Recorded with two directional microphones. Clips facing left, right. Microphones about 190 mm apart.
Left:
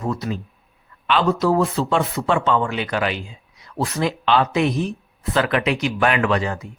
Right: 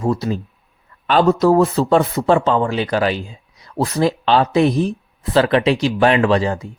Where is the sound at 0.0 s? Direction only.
30° right (ahead or behind).